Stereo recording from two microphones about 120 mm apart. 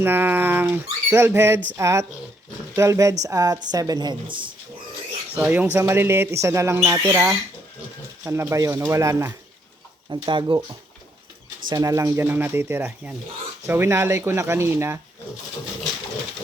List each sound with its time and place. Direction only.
0.0 s a woman's voice: 15° right (ahead or behind); by 4.4 s 40° right (ahead or behind)
5.4 s speech: 15° right (ahead or behind)
10.1 s a woman's voice: 40° right (ahead or behind)
11.7 s speech: 30° right (ahead or behind)